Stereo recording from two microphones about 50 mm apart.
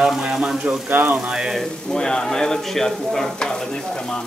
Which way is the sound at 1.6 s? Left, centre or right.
Centre.